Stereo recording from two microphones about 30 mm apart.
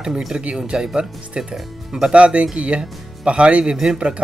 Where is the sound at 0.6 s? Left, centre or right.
Right.